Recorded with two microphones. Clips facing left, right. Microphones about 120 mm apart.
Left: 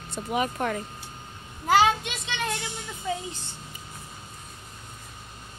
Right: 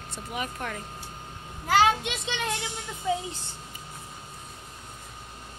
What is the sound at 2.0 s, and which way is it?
Speech, 25° right (ahead or behind).